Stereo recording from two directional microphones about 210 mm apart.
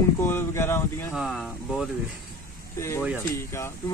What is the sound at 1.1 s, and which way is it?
Speech, centre (ahead or behind).